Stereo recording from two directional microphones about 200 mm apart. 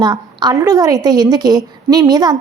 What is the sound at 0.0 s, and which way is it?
A woman's voice, 20° right (ahead or behind).